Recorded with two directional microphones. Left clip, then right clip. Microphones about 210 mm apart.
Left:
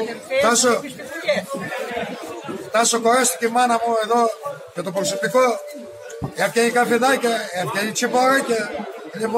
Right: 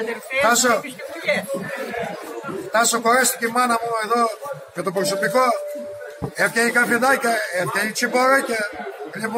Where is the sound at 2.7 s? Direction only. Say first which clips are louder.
Even; 25° left (ahead or behind).